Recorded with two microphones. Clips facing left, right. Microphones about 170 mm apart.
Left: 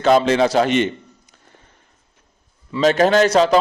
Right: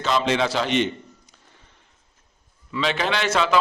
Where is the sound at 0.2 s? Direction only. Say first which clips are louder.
Left 6 dB; 40° left (ahead or behind).